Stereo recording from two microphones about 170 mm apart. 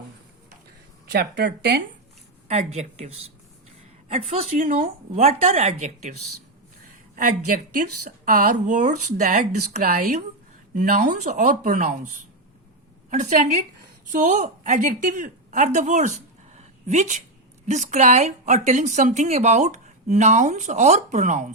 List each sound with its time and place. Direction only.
1.0 s speech: 55° right (ahead or behind)
1.4 s speech: 80° right
2.5 s speech: 40° right (ahead or behind)
4.6 s speech: 55° right (ahead or behind)
5.1 s speech: 40° right (ahead or behind)
7.2 s speech: 50° right (ahead or behind)
13.1 s a woman's voice: 45° right (ahead or behind)
16.6 s a sound: 40° right (ahead or behind)
17.7 s speech: 45° right (ahead or behind)